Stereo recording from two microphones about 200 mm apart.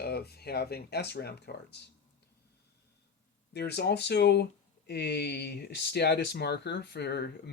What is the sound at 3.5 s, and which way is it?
Speech, 55° left (ahead or behind).